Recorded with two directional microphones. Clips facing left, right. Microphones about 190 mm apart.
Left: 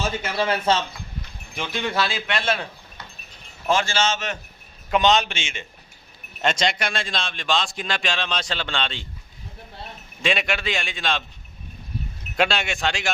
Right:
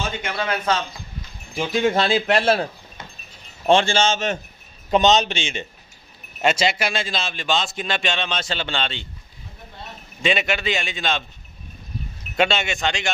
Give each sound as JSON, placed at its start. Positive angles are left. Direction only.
{"t": 0.3, "sound": "a man's voice", "side_deg": 30}
{"t": 1.8, "sound": "speech", "side_deg": -50}
{"t": 2.0, "sound": "a man's voice", "side_deg": -35}
{"t": 3.7, "sound": "a man's voice", "side_deg": -30}
{"t": 5.3, "sound": "a man's voice", "side_deg": -35}
{"t": 6.4, "sound": "a man's voice", "side_deg": -5}
{"t": 10.2, "sound": "a man's voice", "side_deg": 0}
{"t": 12.4, "sound": "a man's voice", "side_deg": 0}